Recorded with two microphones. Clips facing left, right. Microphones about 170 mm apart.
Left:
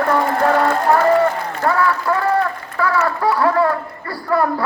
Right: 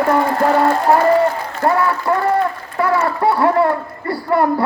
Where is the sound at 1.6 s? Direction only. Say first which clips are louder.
Right 2 dB; 25° right (ahead or behind).